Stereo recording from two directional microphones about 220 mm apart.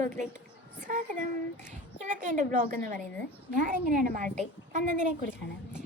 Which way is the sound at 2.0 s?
35° right (ahead or behind).